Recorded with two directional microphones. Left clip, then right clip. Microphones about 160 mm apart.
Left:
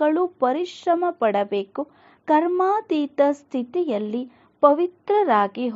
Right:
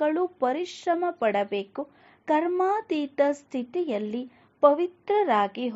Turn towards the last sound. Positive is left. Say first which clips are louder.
# left 4 dB
turn(degrees=25)  # may be behind; listen again after turning